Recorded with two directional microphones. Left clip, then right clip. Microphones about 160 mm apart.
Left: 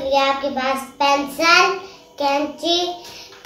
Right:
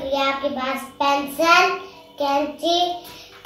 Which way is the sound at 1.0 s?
20° left (ahead or behind).